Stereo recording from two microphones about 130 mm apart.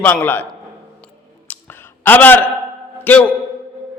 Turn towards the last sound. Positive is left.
turn(degrees=15)  # may be behind; listen again after turning